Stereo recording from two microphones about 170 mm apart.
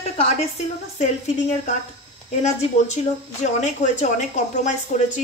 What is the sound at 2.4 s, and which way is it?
Speech, 45° left (ahead or behind).